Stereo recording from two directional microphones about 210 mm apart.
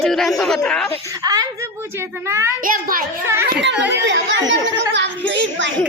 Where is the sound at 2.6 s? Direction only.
40° right (ahead or behind).